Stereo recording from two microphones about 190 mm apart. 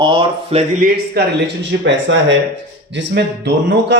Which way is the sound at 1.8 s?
70° right (ahead or behind).